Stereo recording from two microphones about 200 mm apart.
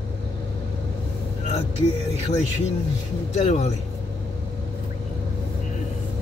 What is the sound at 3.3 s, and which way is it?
Speech, 35° left (ahead or behind).